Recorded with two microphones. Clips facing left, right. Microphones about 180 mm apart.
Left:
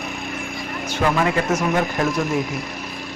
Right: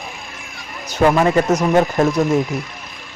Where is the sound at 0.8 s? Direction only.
40° right (ahead or behind).